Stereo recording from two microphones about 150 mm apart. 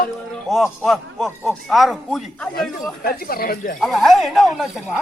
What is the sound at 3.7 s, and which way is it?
Speech, centre (ahead or behind).